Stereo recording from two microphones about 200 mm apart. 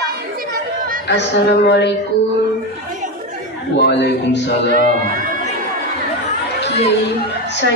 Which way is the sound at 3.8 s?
60° left (ahead or behind).